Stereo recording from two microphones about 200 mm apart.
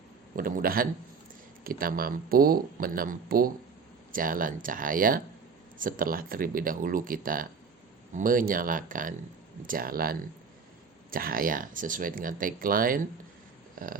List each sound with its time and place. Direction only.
0.3 s speech: 45° right (ahead or behind)